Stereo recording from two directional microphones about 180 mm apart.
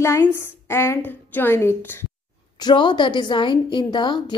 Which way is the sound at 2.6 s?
25° left (ahead or behind).